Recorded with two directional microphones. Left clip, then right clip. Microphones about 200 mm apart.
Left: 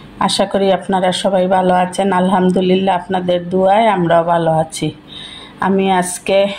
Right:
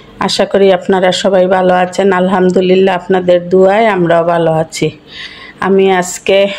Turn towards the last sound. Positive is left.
turn(degrees=-25)  # may be behind; listen again after turning